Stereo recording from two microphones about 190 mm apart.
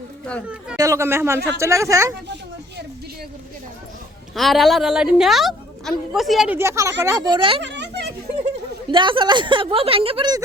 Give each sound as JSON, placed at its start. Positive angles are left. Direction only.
{"t": 0.8, "sound": "speech", "side_deg": -15}
{"t": 4.4, "sound": "a woman's voice", "side_deg": 0}
{"t": 6.6, "sound": "a woman's voice", "side_deg": -15}
{"t": 7.6, "sound": "a sound", "side_deg": -65}
{"t": 8.9, "sound": "a woman's voice", "side_deg": -25}